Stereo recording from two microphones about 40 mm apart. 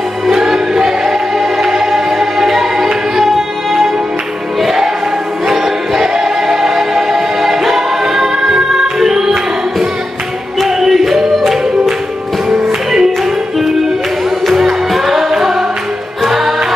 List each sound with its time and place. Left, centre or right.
0.3 s music: centre
10.8 s music: centre
14.4 s music: centre